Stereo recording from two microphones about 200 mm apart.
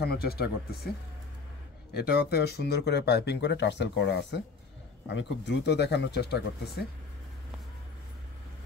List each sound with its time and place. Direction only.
0.0 s speech: 50° left (ahead or behind)
2.0 s speech: 50° left (ahead or behind)